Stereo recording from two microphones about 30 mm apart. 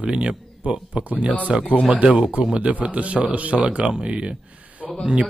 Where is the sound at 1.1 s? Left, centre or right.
Right.